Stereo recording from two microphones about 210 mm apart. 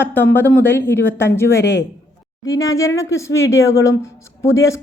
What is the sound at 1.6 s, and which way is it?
Speech, 60° left (ahead or behind).